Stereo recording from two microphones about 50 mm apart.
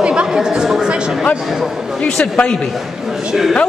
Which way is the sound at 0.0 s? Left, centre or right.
Right.